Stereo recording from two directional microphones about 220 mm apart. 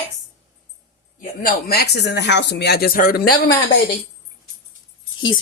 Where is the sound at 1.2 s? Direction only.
40° left (ahead or behind).